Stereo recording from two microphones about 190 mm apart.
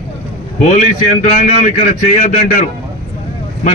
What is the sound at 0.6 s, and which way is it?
A man's voice, 40° left (ahead or behind).